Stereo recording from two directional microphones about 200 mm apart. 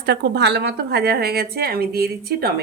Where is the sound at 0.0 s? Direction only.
55° right (ahead or behind).